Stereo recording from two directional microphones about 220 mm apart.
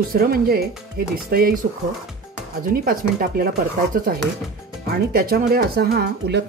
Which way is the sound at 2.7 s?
40° right (ahead or behind).